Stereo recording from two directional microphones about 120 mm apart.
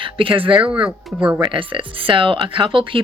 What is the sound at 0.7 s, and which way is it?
Speech, 5° right (ahead or behind).